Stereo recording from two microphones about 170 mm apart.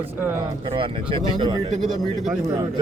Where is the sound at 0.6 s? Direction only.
30° right (ahead or behind).